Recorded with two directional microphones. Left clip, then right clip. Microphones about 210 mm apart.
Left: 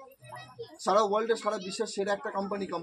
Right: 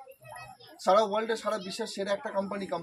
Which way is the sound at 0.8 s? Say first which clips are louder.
Right 1 dB; 10° right (ahead or behind).